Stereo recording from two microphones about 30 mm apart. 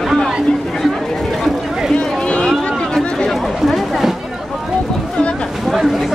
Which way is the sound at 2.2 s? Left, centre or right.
Left.